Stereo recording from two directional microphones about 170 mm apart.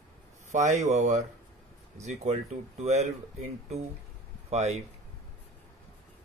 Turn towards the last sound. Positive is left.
turn(degrees=-40)  # may be behind; listen again after turning